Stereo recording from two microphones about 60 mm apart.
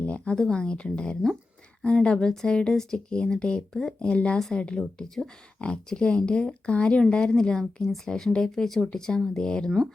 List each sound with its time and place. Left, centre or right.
0.0 s speech: left